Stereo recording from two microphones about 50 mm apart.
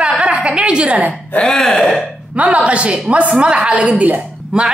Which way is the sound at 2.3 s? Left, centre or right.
Right.